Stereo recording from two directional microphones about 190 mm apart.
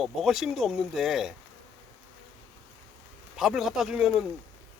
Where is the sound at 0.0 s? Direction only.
Centre (ahead or behind).